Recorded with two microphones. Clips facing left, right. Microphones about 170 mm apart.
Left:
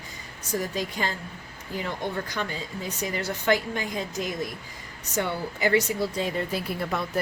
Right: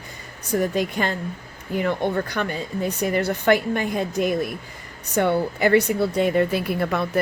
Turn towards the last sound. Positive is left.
turn(degrees=-65)  # may be behind; listen again after turning